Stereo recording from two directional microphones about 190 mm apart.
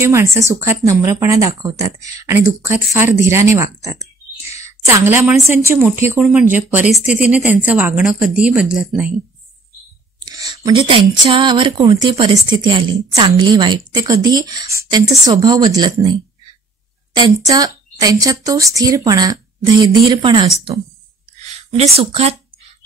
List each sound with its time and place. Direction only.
0.0 s a woman's voice: 15° right (ahead or behind)
10.2 s a sound: 20° right (ahead or behind)
10.6 s a woman's voice: 25° right (ahead or behind)
21.4 s speech: 35° right (ahead or behind)